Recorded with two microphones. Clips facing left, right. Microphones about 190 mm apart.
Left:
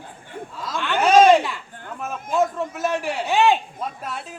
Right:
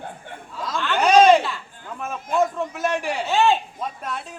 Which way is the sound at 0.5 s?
Centre (ahead or behind).